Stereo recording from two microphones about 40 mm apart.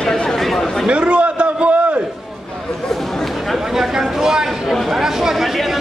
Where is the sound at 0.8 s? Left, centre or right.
Right.